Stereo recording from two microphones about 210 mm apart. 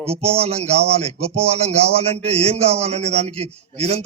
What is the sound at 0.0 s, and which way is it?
Speech, 30° right (ahead or behind).